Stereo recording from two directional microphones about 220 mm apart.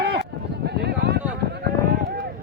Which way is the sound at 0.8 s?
50° right (ahead or behind).